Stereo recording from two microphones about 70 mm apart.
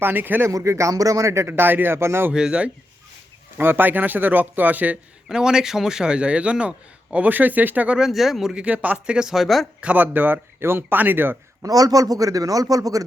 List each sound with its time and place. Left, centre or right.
0.0 s speech: right
0.4 s speech: right
2.3 s a man's voice: centre
3.6 s speech: right
5.3 s a man's voice: centre
7.9 s speech: centre
8.6 s speech: right
9.1 s speech: centre
9.8 s speech: right
11.6 s a man's voice: right